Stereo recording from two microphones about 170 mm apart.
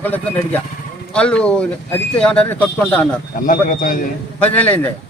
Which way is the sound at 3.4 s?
55° left (ahead or behind).